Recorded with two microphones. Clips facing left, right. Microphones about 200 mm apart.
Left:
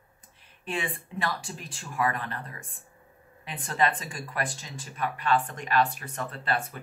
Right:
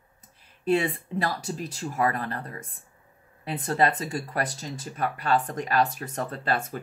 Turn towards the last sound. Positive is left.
turn(degrees=-40)  # may be behind; listen again after turning